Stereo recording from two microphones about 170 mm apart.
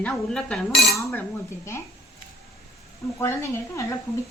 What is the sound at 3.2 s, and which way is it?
Speech, 15° left (ahead or behind).